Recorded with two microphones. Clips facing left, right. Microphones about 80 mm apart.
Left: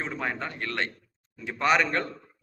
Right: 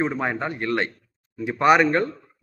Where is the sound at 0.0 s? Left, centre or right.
Right.